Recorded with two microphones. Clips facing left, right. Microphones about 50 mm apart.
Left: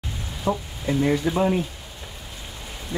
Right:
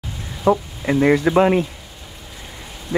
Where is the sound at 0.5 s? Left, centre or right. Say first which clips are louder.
Right 7 dB; right.